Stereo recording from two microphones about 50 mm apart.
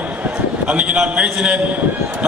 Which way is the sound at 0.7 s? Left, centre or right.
Right.